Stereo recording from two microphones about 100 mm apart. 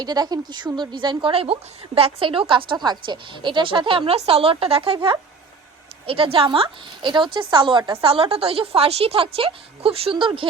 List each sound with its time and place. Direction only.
0.0 s a woman's voice: 45° right (ahead or behind)
1.3 s a woman's voice: 70° right (ahead or behind)
6.1 s a woman's voice: 65° right (ahead or behind); by 7.9 s 50° right (ahead or behind)
8.0 s a woman's voice: 70° right (ahead or behind)